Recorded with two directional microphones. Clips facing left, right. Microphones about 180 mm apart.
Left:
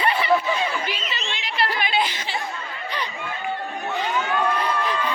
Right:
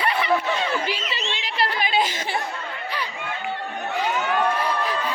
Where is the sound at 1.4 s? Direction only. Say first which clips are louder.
Left 1 dB; 35° right (ahead or behind).